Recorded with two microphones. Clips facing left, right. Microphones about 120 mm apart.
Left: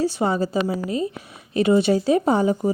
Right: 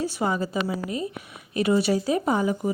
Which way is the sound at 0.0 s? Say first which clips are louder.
Left 4 dB; 30° left (ahead or behind).